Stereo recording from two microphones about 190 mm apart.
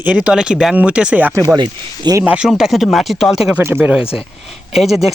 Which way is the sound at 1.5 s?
20° right (ahead or behind).